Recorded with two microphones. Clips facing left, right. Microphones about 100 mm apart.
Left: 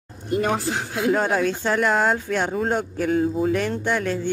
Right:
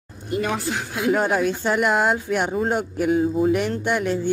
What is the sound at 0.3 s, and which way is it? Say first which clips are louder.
Speech: left 2 dB; 40° left (ahead or behind).